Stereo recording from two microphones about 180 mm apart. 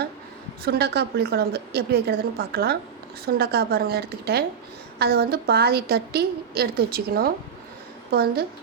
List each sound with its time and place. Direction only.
0.6 s a woman's voice: 60° right (ahead or behind)